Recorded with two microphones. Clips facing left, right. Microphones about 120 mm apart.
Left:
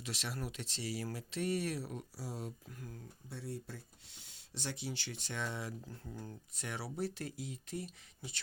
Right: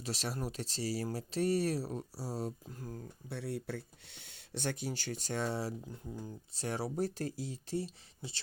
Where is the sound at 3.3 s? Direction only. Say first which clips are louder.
Right 6 dB; 70° right (ahead or behind); by 5.7 s 35° right (ahead or behind).